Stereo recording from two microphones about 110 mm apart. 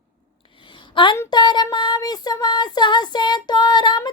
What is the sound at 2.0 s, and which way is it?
Child singing, 35° left (ahead or behind).